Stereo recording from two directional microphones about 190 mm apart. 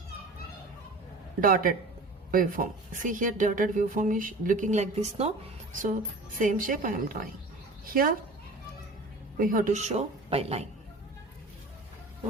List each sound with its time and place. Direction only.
1.4 s speech: 45° right (ahead or behind)
5.8 s speech: 45° right (ahead or behind)
9.4 s a woman's voice: 45° right (ahead or behind)